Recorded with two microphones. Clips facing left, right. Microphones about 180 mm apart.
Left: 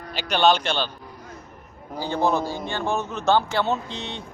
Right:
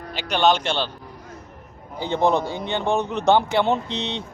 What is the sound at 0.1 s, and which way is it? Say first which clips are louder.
Speech: even; 15° right (ahead or behind).